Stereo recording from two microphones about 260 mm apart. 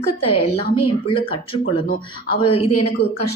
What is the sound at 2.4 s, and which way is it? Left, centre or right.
Speech, left.